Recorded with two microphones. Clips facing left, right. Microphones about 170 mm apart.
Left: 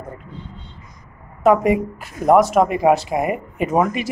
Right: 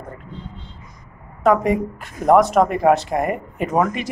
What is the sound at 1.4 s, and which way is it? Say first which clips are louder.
A woman's voice: left 2 dB; 10° left (ahead or behind).